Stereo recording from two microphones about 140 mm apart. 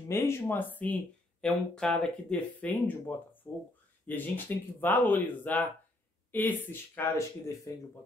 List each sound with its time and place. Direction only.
0.1 s speech: 20° left (ahead or behind)